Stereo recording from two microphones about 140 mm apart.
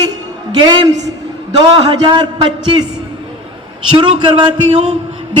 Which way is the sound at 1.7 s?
35° right (ahead or behind).